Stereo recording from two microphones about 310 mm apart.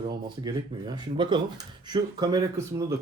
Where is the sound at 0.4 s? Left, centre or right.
Centre.